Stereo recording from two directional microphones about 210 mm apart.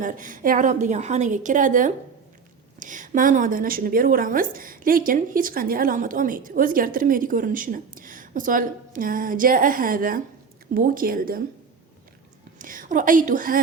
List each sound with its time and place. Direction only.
0.0 s a woman's voice: 40° right (ahead or behind)
12.5 s a woman's voice: 40° right (ahead or behind)